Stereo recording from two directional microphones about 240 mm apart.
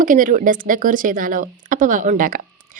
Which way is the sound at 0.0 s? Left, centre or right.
Right.